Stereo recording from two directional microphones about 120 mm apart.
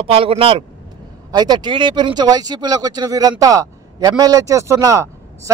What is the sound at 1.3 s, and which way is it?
Speech, 35° right (ahead or behind).